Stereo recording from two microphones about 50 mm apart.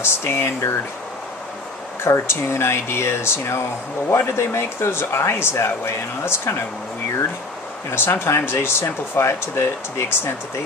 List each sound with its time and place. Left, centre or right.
0.0 s speech: left
2.0 s speech: left
7.9 s speech: left
8.3 s speech: left